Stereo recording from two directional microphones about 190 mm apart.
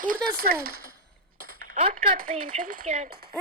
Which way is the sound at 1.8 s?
30° right (ahead or behind).